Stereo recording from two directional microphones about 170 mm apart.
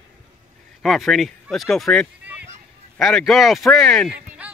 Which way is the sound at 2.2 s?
10° right (ahead or behind).